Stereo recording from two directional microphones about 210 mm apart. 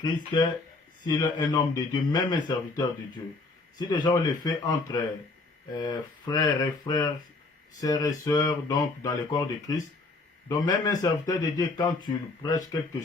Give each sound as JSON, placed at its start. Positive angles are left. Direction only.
{"t": 0.0, "sound": "a man's voice", "side_deg": 20}